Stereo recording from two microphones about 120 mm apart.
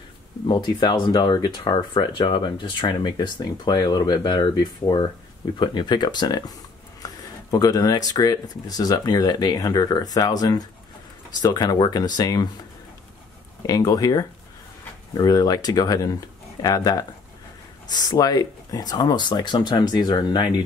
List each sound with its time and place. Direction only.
0.5 s speech: 35° left (ahead or behind)
13.6 s speech: 35° left (ahead or behind)